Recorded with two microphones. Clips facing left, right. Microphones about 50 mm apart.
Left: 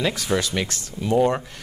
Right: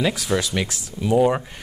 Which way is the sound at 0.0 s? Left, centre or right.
Centre.